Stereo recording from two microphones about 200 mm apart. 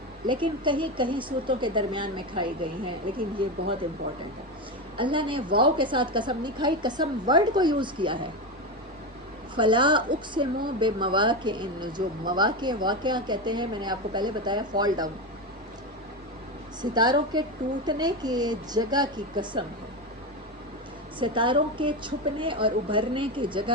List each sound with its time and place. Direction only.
0.3 s speech: 25° right (ahead or behind)
4.9 s speech: 25° right (ahead or behind)
9.6 s speech: 25° right (ahead or behind)
16.8 s speech: 20° right (ahead or behind)
21.2 s speech: 25° right (ahead or behind)